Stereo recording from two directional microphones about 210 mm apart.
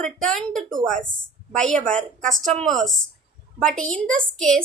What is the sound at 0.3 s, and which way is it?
A child's voice, centre (ahead or behind).